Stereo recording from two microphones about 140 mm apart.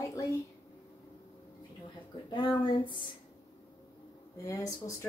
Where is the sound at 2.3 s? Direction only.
35° left (ahead or behind).